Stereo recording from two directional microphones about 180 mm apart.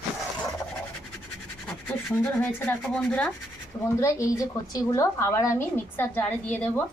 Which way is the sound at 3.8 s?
15° left (ahead or behind).